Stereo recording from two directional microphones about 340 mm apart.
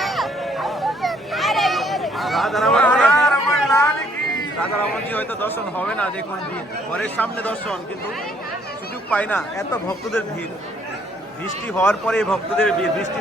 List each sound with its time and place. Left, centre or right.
0.0 s a sound: centre
5.1 s a man's voice: centre
9.0 s a man's voice: centre
11.7 s a man's voice: centre